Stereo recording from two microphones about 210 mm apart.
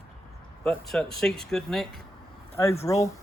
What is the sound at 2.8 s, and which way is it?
Speech, 15° left (ahead or behind).